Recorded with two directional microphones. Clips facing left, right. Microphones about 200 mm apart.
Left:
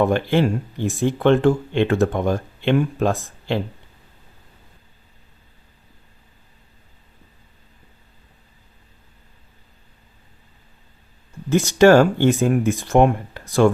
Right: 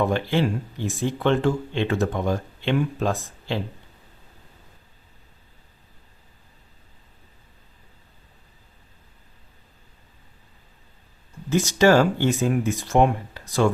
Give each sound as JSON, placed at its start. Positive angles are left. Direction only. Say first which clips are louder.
{"t": 0.0, "sound": "speech", "louder": "left 4 dB", "side_deg": 55}
{"t": 11.4, "sound": "speech", "louder": "left 5 dB", "side_deg": 55}